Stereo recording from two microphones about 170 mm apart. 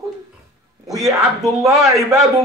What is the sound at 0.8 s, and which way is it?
Speech, 20° right (ahead or behind).